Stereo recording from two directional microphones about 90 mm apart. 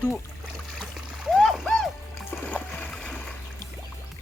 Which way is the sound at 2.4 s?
15° left (ahead or behind).